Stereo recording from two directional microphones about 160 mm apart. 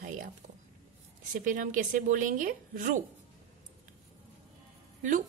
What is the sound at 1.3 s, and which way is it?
A woman's voice, 55° right (ahead or behind).